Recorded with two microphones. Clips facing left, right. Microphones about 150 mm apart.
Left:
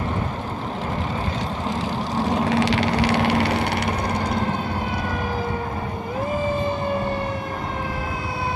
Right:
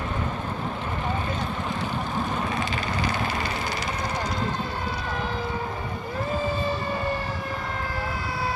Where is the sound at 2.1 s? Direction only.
90° left; by 3.9 s 70° left (ahead or behind).